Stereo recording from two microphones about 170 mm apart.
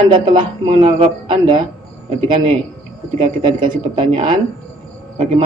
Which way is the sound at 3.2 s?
30° right (ahead or behind).